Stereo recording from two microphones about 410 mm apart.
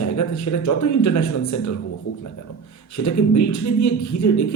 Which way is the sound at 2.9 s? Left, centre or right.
Left.